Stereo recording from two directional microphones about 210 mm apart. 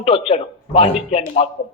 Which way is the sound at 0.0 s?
25° left (ahead or behind).